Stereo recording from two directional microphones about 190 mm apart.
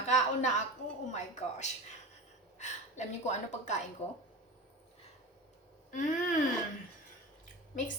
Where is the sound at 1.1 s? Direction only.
35° left (ahead or behind).